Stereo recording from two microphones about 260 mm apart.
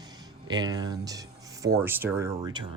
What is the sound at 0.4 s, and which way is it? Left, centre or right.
Speech, centre.